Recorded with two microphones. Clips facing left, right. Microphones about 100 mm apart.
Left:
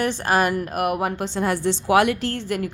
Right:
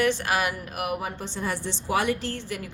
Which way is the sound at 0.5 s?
50° left (ahead or behind).